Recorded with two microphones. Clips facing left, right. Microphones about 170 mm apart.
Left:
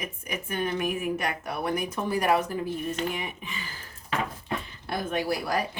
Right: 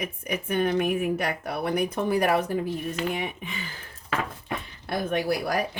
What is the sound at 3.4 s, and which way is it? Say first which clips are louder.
Speech: right 2 dB; 55° right (ahead or behind).